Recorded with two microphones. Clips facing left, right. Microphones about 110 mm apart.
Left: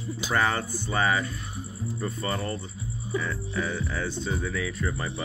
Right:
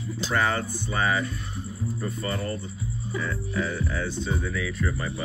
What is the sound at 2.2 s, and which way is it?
Speech, 30° left (ahead or behind).